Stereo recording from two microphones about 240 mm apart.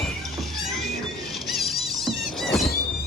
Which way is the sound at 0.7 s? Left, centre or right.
Centre.